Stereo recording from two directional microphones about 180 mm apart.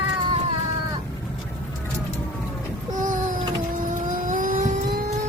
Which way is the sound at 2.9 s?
45° right (ahead or behind).